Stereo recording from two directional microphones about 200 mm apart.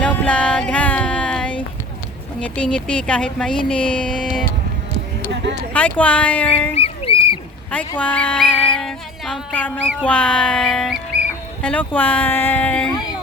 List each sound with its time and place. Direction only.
0.0 s a sound: 5° left (ahead or behind)
2.4 s music: 5° left (ahead or behind)
5.3 s a sound: 60° right (ahead or behind)
5.7 s speech: 5° left (ahead or behind)
6.7 s rodents: 30° left (ahead or behind)
7.9 s music: 5° left (ahead or behind)
11.6 s speech: 5° left (ahead or behind)